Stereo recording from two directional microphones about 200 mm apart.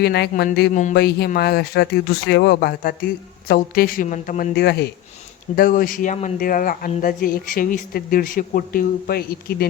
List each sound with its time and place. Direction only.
0.0 s speech: 55° left (ahead or behind)